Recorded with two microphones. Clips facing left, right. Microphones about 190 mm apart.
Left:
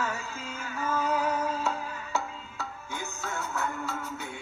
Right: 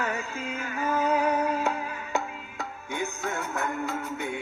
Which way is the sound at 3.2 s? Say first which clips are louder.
Left 1 dB; 60° right (ahead or behind).